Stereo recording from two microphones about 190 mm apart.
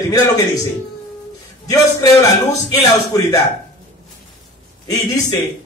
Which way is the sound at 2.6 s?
20° left (ahead or behind).